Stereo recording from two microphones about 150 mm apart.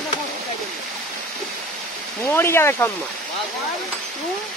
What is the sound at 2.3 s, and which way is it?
Speech, 15° left (ahead or behind).